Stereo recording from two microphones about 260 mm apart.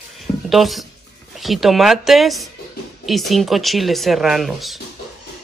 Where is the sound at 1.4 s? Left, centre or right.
Centre.